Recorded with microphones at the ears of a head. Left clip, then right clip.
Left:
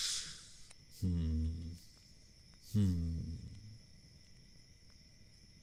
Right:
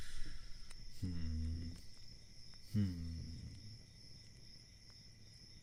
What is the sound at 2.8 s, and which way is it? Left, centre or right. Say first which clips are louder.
Speech: left 6 dB; left.